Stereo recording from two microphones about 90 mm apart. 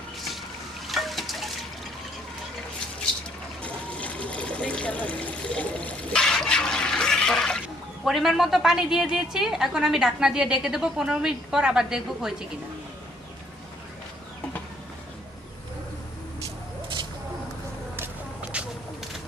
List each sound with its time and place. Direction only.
0.9 s liquid: centre (ahead or behind)
3.6 s water: 15° left (ahead or behind)
8.0 s a woman's voice: 5° right (ahead or behind)
18.5 s a sound: 10° right (ahead or behind)